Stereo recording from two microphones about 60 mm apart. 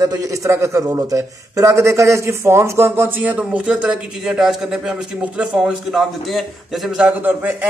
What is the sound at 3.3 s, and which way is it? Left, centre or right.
A man's voice, centre.